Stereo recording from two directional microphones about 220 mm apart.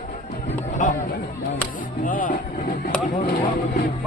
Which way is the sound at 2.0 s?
40° left (ahead or behind).